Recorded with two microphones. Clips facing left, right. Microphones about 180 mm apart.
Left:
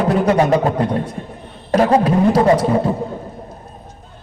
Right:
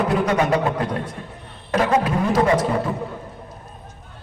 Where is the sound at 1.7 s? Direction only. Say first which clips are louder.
Left 6 dB; 35° left (ahead or behind).